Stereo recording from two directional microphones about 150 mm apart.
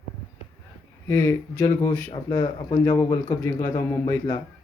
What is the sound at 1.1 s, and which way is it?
Speech, 20° left (ahead or behind).